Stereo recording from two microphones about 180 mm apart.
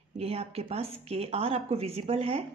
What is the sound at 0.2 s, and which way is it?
Speech, 35° right (ahead or behind).